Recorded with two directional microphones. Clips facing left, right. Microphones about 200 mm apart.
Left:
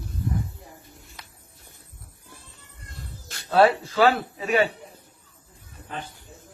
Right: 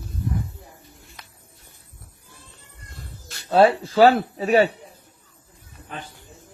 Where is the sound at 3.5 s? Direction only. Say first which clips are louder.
Right 2 dB; 30° right (ahead or behind).